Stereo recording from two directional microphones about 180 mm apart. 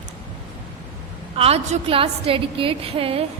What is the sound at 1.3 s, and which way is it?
A woman's voice, 35° right (ahead or behind).